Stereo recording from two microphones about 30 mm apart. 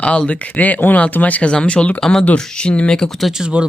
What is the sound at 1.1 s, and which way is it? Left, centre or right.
Speech, left.